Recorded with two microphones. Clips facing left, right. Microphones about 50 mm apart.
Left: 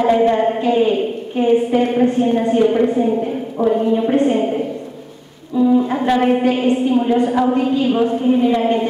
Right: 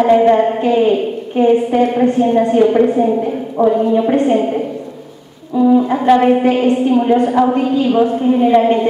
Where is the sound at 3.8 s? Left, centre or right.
Right.